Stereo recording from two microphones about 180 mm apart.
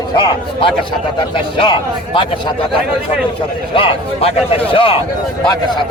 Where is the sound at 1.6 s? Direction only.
25° left (ahead or behind).